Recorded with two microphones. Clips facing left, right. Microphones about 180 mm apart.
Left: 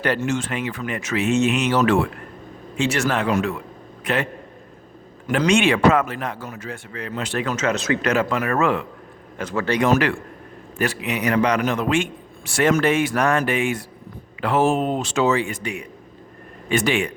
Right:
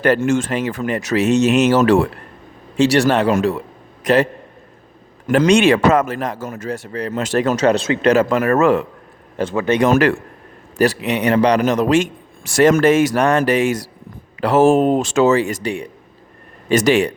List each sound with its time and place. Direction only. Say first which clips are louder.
0.0 s a man's voice: right 7 dB; 50° right (ahead or behind)
5.3 s a man's voice: right 6 dB; 40° right (ahead or behind)
9.4 s speech: right 5 dB; 25° right (ahead or behind)
9.9 s a man's voice: right 5 dB; 45° right (ahead or behind)
15.6 s a man's voice: right 6 dB; 30° right (ahead or behind)